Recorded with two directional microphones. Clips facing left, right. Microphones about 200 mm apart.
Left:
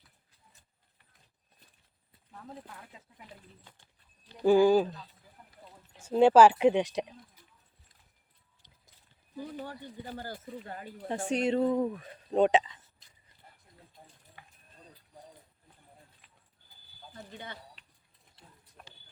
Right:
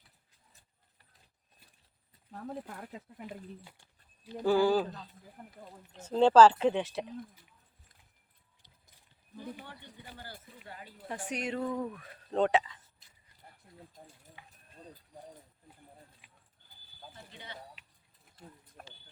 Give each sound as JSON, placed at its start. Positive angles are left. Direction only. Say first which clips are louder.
{"t": 2.3, "sound": "speech", "louder": "right 6 dB", "side_deg": -45}
{"t": 4.4, "sound": "speech", "louder": "left 4 dB", "side_deg": 15}
{"t": 5.4, "sound": "speech", "louder": "right 8 dB", "side_deg": -50}
{"t": 6.0, "sound": "speech", "louder": "left 1 dB", "side_deg": 10}
{"t": 9.6, "sound": "speech", "louder": "left 9 dB", "side_deg": 45}
{"t": 11.1, "sound": "speech", "louder": "left 8 dB", "side_deg": 25}
{"t": 14.4, "sound": "a sound", "louder": "left 2 dB", "side_deg": 45}
{"t": 16.2, "sound": "horse", "louder": "right 1 dB", "side_deg": -10}
{"t": 17.3, "sound": "speech", "louder": "left 5 dB", "side_deg": 50}
{"t": 18.3, "sound": "printer", "louder": "right 5 dB", "side_deg": -50}